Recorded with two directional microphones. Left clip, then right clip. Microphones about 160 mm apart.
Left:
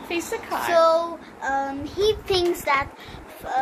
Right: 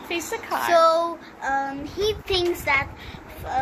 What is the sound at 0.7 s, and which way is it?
Speech, 20° right (ahead or behind).